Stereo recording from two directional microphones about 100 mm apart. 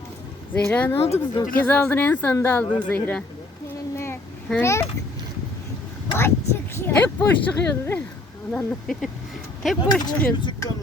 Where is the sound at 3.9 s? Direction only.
25° left (ahead or behind).